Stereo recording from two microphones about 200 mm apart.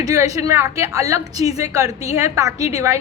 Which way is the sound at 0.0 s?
15° right (ahead or behind).